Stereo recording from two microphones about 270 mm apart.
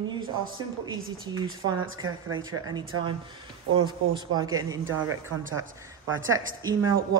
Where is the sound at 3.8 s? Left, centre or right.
Centre.